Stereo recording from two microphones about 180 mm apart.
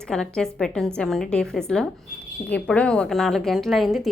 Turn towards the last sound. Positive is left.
turn(degrees=0)  # may be behind; listen again after turning